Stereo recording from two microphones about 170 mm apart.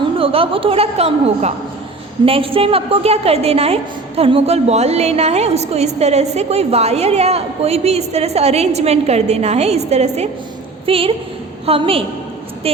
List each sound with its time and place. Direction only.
0.2 s a woman's voice: 35° right (ahead or behind)